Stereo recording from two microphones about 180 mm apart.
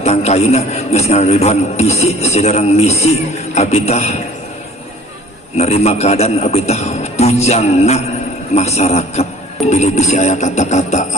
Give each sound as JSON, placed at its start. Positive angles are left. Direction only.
{"t": 0.0, "sound": "speech", "side_deg": 35}
{"t": 5.5, "sound": "speech", "side_deg": 35}